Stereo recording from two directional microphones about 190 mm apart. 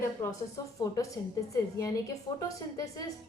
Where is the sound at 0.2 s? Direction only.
20° left (ahead or behind).